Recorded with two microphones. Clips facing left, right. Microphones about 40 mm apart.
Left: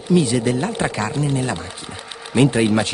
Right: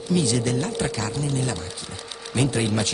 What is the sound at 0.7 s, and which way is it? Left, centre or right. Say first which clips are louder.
A man's voice: left 4 dB; left.